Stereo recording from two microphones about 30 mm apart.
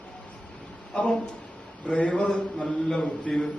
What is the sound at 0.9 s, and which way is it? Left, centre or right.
A man's voice, left.